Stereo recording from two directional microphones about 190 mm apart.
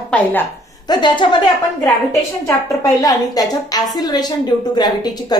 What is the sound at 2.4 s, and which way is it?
A woman's voice, 15° left (ahead or behind).